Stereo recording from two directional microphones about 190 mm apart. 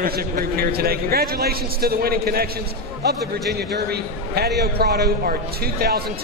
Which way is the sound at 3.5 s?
55° right (ahead or behind).